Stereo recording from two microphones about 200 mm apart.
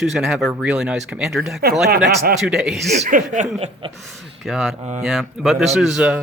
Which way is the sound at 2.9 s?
40° right (ahead or behind).